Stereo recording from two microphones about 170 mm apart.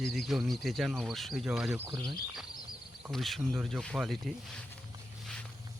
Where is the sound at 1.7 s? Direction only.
15° right (ahead or behind).